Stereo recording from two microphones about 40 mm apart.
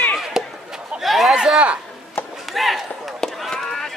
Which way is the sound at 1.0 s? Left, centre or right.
Centre.